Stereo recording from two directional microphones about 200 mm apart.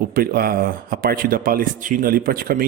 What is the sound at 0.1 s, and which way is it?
Speech, 45° right (ahead or behind).